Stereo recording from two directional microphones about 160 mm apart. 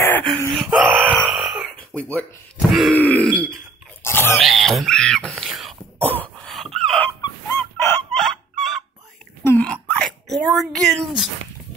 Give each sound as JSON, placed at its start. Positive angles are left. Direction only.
{"t": 0.0, "sound": "wail", "side_deg": 15}
{"t": 0.7, "sound": "wail", "side_deg": 0}
{"t": 2.0, "sound": "grunt", "side_deg": 10}
{"t": 4.4, "sound": "speech", "side_deg": 0}
{"t": 5.9, "sound": "cough", "side_deg": 10}
{"t": 7.2, "sound": "chicken", "side_deg": 25}
{"t": 7.5, "sound": "chicken", "side_deg": 15}
{"t": 8.2, "sound": "fowl", "side_deg": 0}
{"t": 9.4, "sound": "wail", "side_deg": 10}
{"t": 10.3, "sound": "a woman's voice", "side_deg": 0}